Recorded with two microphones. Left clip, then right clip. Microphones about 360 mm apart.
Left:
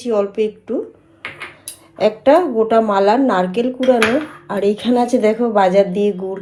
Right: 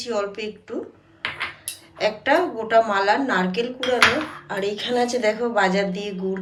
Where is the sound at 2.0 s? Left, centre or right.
Centre.